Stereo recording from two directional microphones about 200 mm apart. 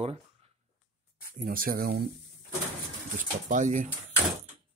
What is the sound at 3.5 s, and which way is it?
Speech, 40° right (ahead or behind).